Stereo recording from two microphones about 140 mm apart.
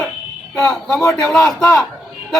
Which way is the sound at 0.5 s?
5° left (ahead or behind).